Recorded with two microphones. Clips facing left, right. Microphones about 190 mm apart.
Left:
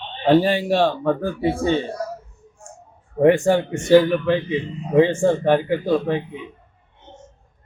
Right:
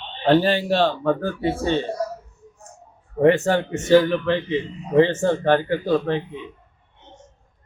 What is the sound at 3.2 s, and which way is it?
A man's voice, 10° left (ahead or behind).